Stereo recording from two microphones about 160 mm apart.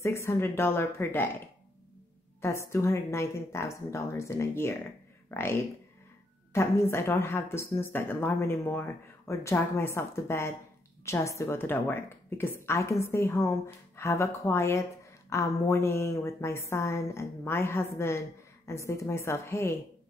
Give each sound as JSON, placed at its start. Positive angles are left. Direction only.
{"t": 0.0, "sound": "speech", "side_deg": 15}
{"t": 2.4, "sound": "speech", "side_deg": 15}